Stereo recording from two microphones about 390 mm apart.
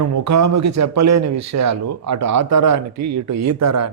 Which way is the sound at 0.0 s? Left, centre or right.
Right.